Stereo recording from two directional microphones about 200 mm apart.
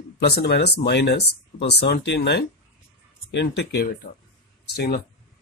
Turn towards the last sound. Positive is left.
turn(degrees=55)  # may be behind; listen again after turning